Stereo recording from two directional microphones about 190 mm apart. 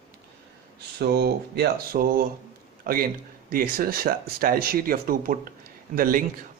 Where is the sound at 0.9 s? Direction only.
60° right (ahead or behind).